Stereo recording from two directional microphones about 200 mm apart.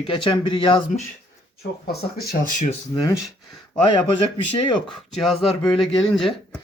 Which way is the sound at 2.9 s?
20° left (ahead or behind).